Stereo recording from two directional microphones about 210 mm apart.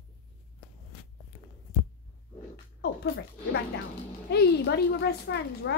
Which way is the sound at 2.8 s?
50° left (ahead or behind).